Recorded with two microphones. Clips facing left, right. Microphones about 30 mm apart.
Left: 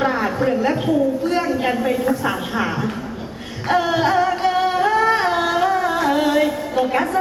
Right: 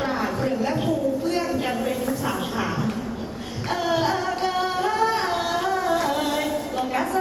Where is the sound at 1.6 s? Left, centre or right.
Left.